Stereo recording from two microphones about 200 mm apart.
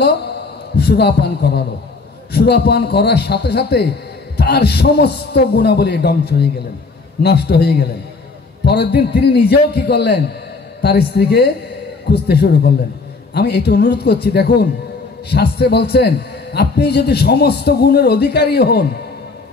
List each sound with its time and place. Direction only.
0.7 s a man's voice: 55° left (ahead or behind)